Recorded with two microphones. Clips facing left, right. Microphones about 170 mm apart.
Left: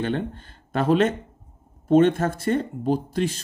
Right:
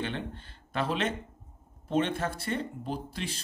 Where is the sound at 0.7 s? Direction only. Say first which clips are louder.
Left 10 dB; 45° left (ahead or behind).